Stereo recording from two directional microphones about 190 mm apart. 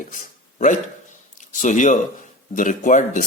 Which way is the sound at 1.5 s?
40° left (ahead or behind).